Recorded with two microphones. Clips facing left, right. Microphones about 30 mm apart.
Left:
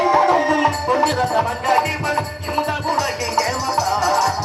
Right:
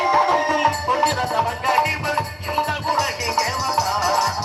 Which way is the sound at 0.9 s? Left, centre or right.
Centre.